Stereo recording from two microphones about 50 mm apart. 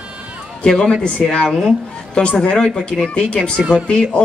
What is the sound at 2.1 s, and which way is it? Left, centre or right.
Speech, left.